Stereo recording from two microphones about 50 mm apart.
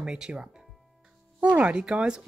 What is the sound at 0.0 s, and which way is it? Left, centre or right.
Speech, centre.